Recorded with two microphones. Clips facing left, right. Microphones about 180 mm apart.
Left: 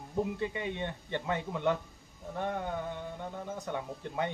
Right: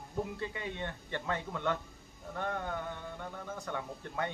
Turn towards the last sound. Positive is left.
turn(degrees=20)  # may be behind; listen again after turning